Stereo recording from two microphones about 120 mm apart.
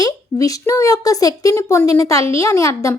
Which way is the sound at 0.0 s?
30° left (ahead or behind).